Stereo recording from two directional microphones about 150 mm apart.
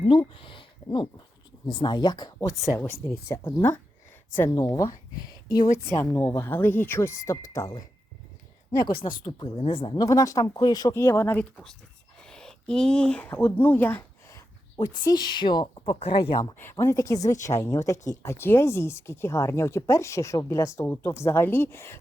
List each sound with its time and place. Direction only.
0.1 s a sound: 35° left (ahead or behind)
1.6 s speech: 30° left (ahead or behind)
8.9 s speech: 75° left (ahead or behind)
9.2 s speech: 35° left (ahead or behind); by 11.4 s 15° left (ahead or behind)
12.2 s speech: 5° left (ahead or behind); by 16.6 s 30° left (ahead or behind)
16.6 s speech: 15° left (ahead or behind)